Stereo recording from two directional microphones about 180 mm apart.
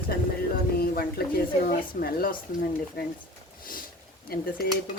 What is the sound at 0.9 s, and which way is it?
Speech, 55° left (ahead or behind).